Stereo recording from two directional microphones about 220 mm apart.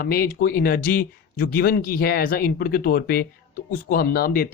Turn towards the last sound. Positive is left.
turn(degrees=45)  # may be behind; listen again after turning